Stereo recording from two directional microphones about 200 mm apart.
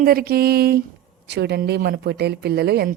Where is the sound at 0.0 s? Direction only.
50° right (ahead or behind).